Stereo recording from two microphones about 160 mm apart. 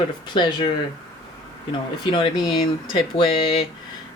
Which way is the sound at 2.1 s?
30° left (ahead or behind).